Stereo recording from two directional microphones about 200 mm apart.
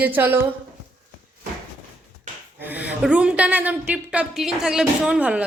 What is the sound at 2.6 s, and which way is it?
A woman's voice, 10° right (ahead or behind).